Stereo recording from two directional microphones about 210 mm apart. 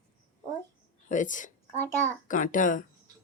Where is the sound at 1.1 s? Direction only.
35° left (ahead or behind).